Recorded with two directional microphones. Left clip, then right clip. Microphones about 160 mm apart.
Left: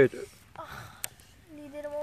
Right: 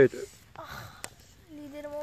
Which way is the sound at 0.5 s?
35° right (ahead or behind).